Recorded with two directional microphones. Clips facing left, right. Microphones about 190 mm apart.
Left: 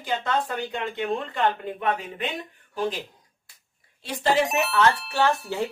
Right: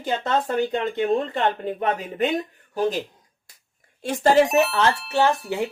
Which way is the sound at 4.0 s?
45° right (ahead or behind).